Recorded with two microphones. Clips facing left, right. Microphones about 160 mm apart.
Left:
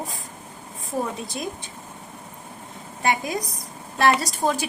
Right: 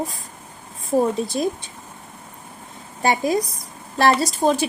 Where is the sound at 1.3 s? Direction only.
35° right (ahead or behind).